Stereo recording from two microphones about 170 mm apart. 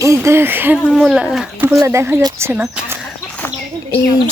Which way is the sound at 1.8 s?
15° right (ahead or behind).